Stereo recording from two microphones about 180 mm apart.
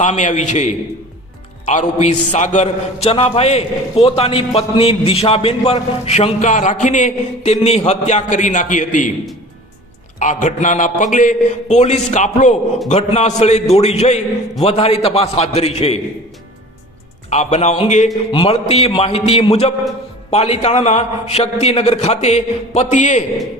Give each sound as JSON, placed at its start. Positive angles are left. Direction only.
{"t": 0.0, "sound": "a man's voice", "side_deg": 40}
{"t": 10.2, "sound": "a man's voice", "side_deg": 45}
{"t": 17.2, "sound": "a man's voice", "side_deg": 35}